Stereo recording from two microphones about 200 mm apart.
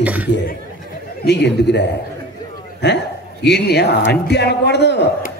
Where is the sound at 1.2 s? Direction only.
55° left (ahead or behind).